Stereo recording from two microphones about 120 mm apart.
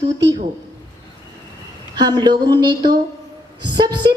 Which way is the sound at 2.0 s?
35° right (ahead or behind).